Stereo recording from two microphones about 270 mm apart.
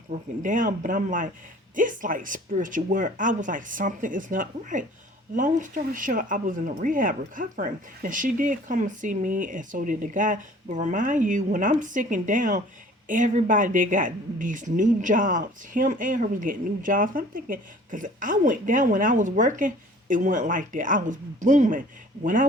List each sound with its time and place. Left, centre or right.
0.1 s speech: right